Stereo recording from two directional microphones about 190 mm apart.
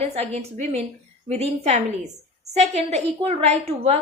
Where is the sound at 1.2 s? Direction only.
35° right (ahead or behind).